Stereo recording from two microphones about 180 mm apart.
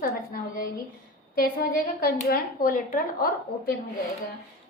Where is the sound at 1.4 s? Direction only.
55° left (ahead or behind).